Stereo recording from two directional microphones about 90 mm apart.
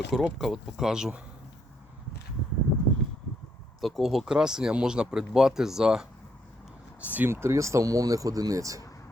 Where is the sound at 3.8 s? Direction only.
Centre (ahead or behind).